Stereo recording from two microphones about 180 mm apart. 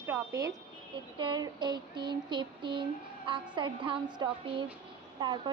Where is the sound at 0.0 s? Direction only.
15° right (ahead or behind).